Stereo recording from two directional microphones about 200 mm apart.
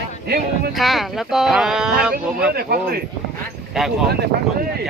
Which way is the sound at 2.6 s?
50° right (ahead or behind).